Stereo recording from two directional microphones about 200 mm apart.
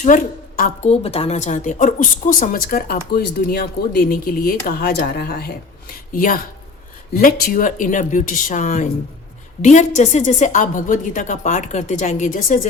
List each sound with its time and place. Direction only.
0.0 s a woman's voice: 40° left (ahead or behind)